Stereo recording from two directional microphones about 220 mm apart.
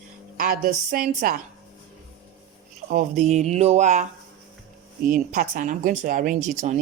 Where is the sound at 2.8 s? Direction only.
35° right (ahead or behind).